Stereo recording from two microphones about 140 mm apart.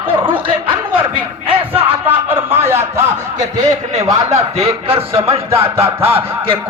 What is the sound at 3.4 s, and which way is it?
A man's voice, 60° right (ahead or behind).